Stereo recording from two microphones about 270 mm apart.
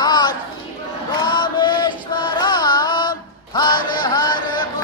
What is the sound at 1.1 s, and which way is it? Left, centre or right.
Carnatic music, centre.